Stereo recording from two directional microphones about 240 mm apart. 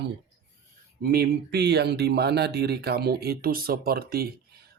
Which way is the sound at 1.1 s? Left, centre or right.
Right.